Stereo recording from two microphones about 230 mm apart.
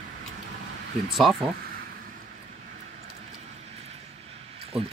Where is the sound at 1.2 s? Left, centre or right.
Centre.